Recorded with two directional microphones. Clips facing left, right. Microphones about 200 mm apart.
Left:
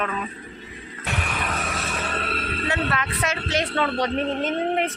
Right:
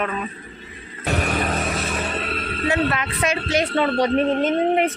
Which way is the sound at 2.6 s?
15° right (ahead or behind).